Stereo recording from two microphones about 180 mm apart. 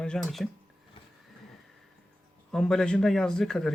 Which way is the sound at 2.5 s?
5° left (ahead or behind).